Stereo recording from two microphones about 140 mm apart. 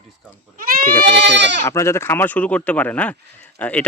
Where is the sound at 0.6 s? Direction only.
90° right.